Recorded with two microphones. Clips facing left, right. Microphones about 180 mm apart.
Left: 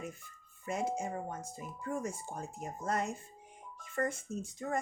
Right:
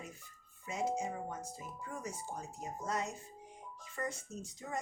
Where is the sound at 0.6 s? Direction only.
55° left (ahead or behind).